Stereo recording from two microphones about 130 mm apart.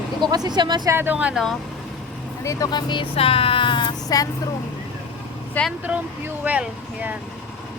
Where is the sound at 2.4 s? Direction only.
25° left (ahead or behind).